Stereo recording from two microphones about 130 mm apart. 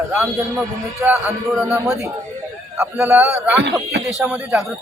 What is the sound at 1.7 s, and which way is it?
Speech, 20° right (ahead or behind).